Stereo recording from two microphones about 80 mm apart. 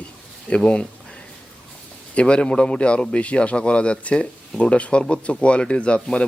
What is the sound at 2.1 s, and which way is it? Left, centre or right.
A man's voice, centre.